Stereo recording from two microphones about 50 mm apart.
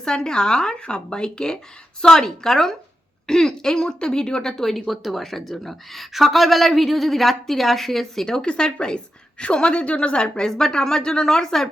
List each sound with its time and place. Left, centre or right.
0.0 s speech: centre
8.4 s speech: centre